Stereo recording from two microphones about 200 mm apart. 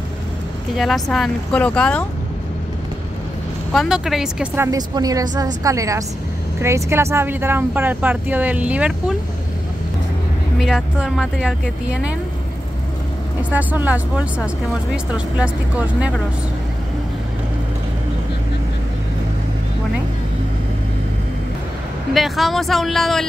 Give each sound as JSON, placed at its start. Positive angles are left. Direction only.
{"t": 0.7, "sound": "a woman's voice", "side_deg": 0}
{"t": 3.7, "sound": "a woman's voice", "side_deg": 0}
{"t": 4.6, "sound": "speech", "side_deg": -20}
{"t": 10.6, "sound": "a woman's voice", "side_deg": 0}
{"t": 13.4, "sound": "speech", "side_deg": -5}
{"t": 22.1, "sound": "a woman's voice", "side_deg": 0}